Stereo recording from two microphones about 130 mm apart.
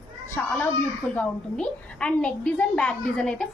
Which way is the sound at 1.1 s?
10° left (ahead or behind).